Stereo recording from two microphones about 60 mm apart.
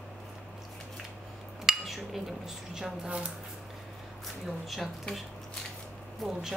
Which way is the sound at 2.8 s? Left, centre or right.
Centre.